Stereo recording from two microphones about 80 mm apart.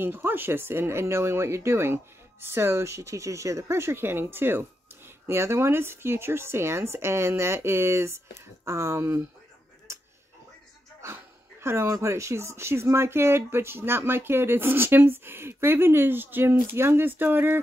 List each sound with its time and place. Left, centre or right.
0.0 s speech: right
9.9 s a sound: right
11.6 s speech: right